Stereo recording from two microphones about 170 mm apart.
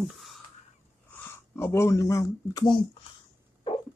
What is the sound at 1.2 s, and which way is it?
Speech, 15° left (ahead or behind).